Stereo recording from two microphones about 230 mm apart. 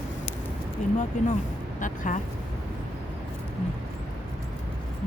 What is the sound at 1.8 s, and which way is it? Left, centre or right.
Speech, left.